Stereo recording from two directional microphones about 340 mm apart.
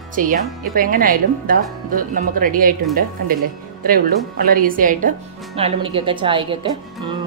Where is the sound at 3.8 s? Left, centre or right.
Right.